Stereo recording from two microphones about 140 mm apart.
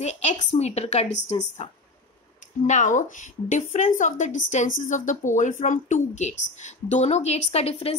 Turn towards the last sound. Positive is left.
turn(degrees=50)  # may be behind; listen again after turning